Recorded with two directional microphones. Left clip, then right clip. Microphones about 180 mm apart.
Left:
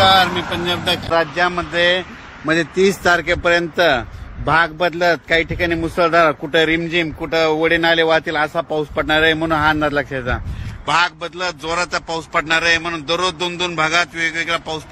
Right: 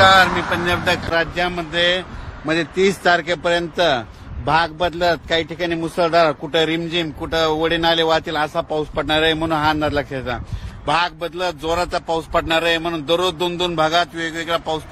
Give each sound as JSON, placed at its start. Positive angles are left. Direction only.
{"t": 0.0, "sound": "speech", "side_deg": -5}
{"t": 1.1, "sound": "a man's voice", "side_deg": 25}
{"t": 10.9, "sound": "a man's voice", "side_deg": -35}
{"t": 12.1, "sound": "speech", "side_deg": 0}
{"t": 12.6, "sound": "a man's voice", "side_deg": -30}